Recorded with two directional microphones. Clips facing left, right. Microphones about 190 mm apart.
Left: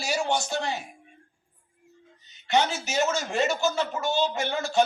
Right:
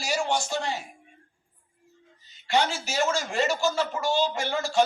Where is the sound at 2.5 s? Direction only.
20° left (ahead or behind).